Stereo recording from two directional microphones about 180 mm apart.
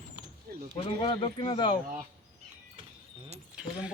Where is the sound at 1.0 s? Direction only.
30° left (ahead or behind).